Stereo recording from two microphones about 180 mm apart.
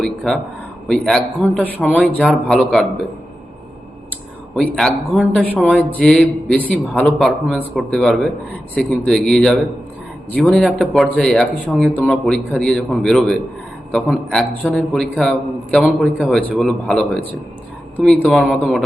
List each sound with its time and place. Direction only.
0.9 s speech: 5° left (ahead or behind)
4.5 s speech: 5° left (ahead or behind)